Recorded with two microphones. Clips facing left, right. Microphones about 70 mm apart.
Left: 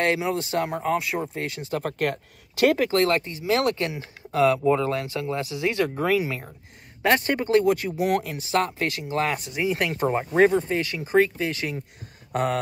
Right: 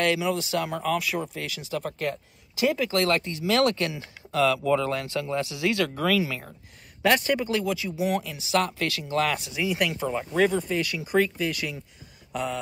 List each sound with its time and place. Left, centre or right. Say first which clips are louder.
0.0 s speech: left 1 dB; left
2.9 s speech: left 2 dB; left
8.5 s speech: left 1 dB; left
12.3 s a sound: left 5 dB; left